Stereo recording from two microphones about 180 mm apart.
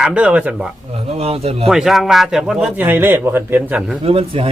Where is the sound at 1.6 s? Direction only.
Centre (ahead or behind).